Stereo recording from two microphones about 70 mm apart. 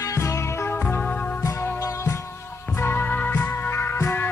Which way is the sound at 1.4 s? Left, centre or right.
Left.